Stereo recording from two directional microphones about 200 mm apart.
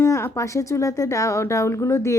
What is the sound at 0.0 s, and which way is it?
A woman's voice, 15° left (ahead or behind).